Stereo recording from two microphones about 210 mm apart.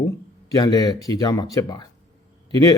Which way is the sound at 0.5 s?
20° left (ahead or behind).